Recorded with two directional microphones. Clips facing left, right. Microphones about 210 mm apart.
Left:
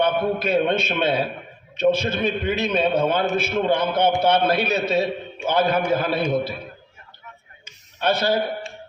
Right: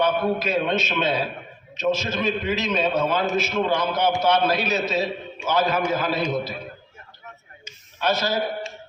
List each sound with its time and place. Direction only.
0.0 s a man's voice: 55° left (ahead or behind)
8.1 s a man's voice: 60° left (ahead or behind)